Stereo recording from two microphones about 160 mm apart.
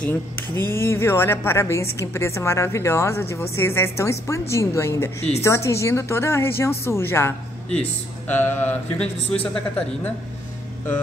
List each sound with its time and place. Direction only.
0.6 s a woman's voice: 15° left (ahead or behind)